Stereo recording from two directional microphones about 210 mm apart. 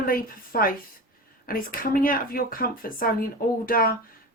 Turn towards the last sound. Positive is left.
turn(degrees=45)  # may be behind; listen again after turning